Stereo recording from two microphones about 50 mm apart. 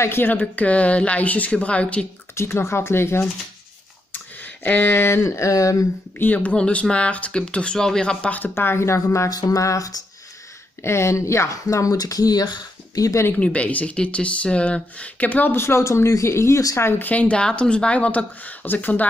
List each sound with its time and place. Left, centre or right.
0.0 s a sound: left
0.3 s speech: left
2.3 s speech: left
4.6 s a sound: left
5.2 s a sound: left
6.1 s speech: left
6.5 s speech: left
8.5 s speech: left
10.8 s speech: left
13.3 s speech: left
15.2 s speech: left
15.5 s a sound: left
15.8 s speech: left
17.0 s speech: left